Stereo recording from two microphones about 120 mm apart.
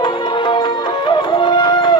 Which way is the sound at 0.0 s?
40° left (ahead or behind).